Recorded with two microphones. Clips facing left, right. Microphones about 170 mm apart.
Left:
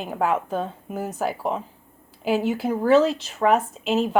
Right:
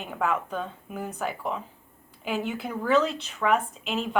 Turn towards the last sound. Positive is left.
turn(degrees=40)  # may be behind; listen again after turning